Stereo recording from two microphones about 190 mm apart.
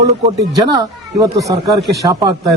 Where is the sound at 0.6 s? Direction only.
20° right (ahead or behind).